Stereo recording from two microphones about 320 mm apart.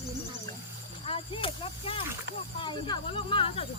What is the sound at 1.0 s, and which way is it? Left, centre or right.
Speech, centre.